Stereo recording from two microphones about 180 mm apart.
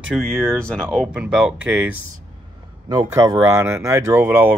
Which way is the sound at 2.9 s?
20° right (ahead or behind).